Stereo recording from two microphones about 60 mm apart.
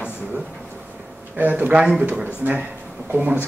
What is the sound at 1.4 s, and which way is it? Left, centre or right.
Speech, right.